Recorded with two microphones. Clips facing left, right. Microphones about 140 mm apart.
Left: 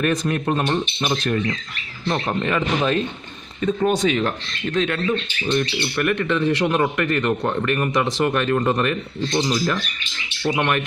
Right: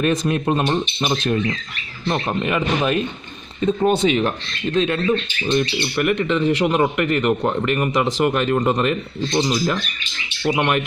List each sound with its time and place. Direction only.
0.0 s a man's voice: 20° right (ahead or behind)
3.6 s a man's voice: 25° right (ahead or behind)